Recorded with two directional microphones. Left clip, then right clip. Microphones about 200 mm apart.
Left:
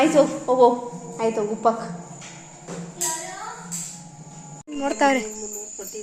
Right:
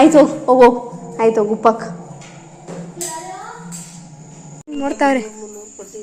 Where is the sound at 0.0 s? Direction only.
40° right (ahead or behind).